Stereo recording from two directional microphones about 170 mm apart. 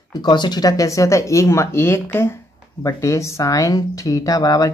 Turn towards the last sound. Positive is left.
turn(degrees=20)  # may be behind; listen again after turning